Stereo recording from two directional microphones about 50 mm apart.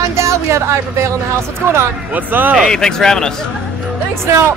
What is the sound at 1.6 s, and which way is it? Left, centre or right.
Speech, right.